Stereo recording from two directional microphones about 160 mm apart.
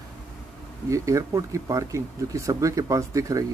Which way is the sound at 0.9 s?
20° right (ahead or behind).